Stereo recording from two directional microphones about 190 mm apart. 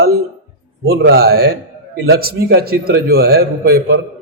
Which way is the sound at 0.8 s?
65° right (ahead or behind).